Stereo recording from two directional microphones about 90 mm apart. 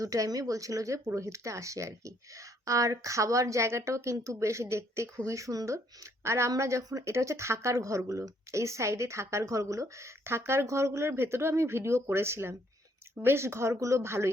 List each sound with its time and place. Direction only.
0.0 s speech: 40° right (ahead or behind)